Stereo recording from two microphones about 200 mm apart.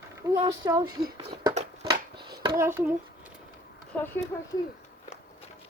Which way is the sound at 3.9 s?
10° left (ahead or behind).